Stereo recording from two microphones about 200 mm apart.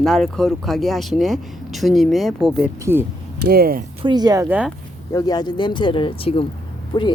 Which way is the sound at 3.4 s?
50° right (ahead or behind).